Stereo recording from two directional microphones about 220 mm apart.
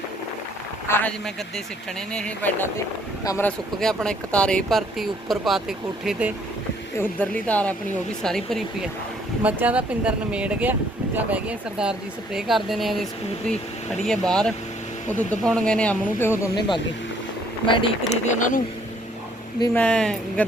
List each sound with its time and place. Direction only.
0.9 s a man's voice: 10° left (ahead or behind)
2.1 s speech: 5° left (ahead or behind)
7.0 s speech: 5° left (ahead or behind); by 18.3 s 25° left (ahead or behind)
18.3 s speech: 35° left (ahead or behind)
19.7 s speech: 5° left (ahead or behind)